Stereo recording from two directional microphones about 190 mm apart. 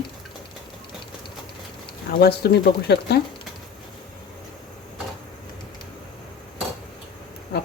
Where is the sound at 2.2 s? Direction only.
55° left (ahead or behind).